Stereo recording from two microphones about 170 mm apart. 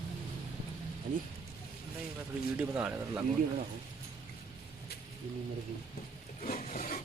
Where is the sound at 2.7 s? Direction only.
10° right (ahead or behind).